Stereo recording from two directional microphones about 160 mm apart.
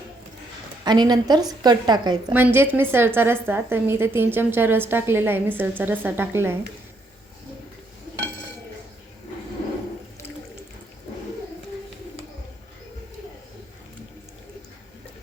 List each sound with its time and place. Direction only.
0.9 s a woman's voice: 25° right (ahead or behind)
2.3 s a woman's voice: 15° right (ahead or behind)